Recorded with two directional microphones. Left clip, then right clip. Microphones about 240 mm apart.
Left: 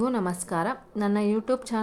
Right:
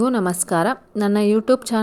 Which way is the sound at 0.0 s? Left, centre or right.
Right.